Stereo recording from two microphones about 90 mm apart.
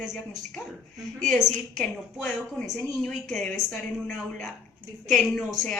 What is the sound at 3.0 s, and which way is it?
Speech, 5° left (ahead or behind).